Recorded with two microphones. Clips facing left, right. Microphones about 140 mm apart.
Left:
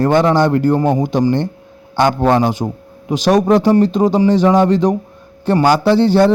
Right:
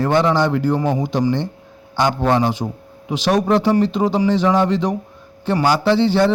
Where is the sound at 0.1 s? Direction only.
50° left (ahead or behind).